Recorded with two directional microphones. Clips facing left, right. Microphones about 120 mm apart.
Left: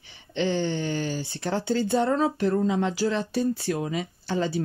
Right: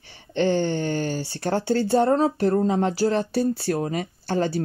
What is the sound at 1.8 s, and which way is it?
Speech, 40° right (ahead or behind).